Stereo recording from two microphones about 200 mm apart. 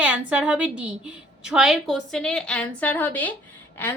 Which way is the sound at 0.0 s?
5° right (ahead or behind).